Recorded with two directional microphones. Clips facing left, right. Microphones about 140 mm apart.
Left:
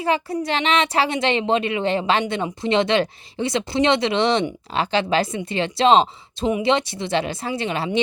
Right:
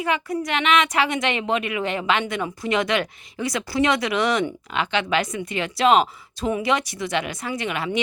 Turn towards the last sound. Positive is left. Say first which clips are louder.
# left 2 dB
turn(degrees=30)  # may be behind; listen again after turning